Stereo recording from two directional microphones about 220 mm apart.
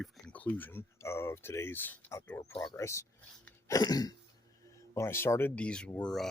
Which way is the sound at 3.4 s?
15° left (ahead or behind).